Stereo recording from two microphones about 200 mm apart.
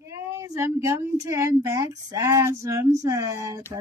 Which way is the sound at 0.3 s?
15° right (ahead or behind).